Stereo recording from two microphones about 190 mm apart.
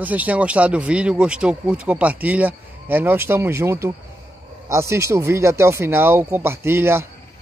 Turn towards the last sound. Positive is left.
turn(degrees=-10)  # may be behind; listen again after turning